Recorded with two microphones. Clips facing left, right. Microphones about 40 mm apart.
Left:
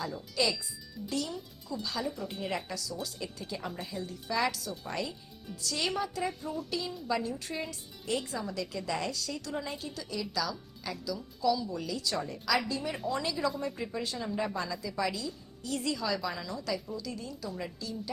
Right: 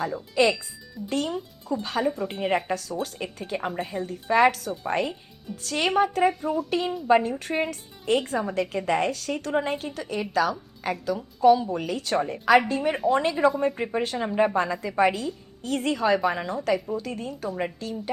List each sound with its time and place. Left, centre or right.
0.1 s a woman's voice: right